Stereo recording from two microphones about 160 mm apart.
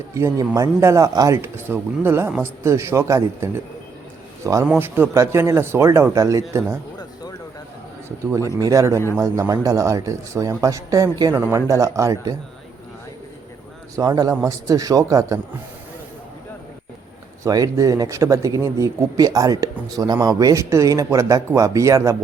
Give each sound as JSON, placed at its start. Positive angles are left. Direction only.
{"t": 0.1, "sound": "speech", "side_deg": -20}
{"t": 4.6, "sound": "speech", "side_deg": -10}
{"t": 8.5, "sound": "speech", "side_deg": -20}
{"t": 13.9, "sound": "speech", "side_deg": -20}
{"t": 17.4, "sound": "speech", "side_deg": -20}